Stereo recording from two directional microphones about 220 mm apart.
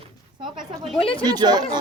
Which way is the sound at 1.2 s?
20° right (ahead or behind).